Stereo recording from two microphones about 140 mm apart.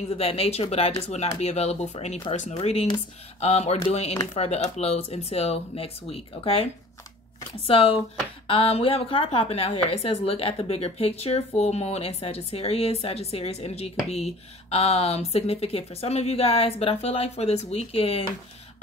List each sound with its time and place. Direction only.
0.2 s speech: 45° left (ahead or behind)